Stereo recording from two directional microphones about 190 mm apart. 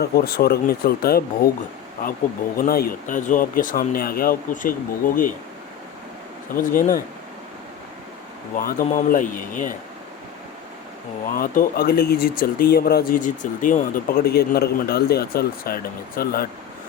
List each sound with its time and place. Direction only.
0.0 s speech: 55° left (ahead or behind)
2.6 s speech: 50° left (ahead or behind)
6.5 s speech: 45° left (ahead or behind)
8.5 s speech: 45° left (ahead or behind)
11.3 s speech: 50° left (ahead or behind)